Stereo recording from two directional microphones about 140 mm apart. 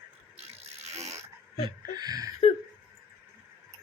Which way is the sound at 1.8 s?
30° right (ahead or behind).